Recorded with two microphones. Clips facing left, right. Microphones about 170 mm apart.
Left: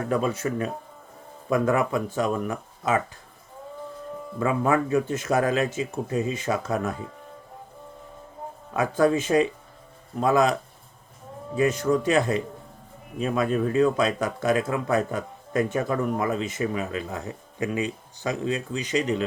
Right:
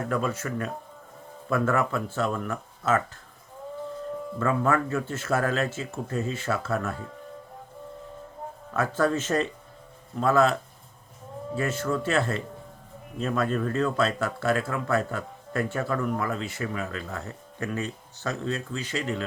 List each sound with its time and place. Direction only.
0.1 s speech: 15° left (ahead or behind)
4.4 s speech: 15° left (ahead or behind)
8.7 s speech: 15° left (ahead or behind)